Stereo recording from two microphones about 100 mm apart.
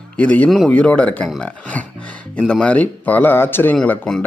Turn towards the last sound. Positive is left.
turn(degrees=5)  # may be behind; listen again after turning